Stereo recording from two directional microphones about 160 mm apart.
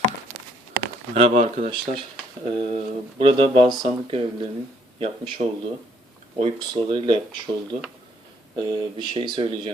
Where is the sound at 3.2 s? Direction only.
35° right (ahead or behind).